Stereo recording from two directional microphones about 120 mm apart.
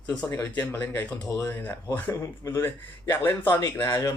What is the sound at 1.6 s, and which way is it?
Speech, 15° left (ahead or behind).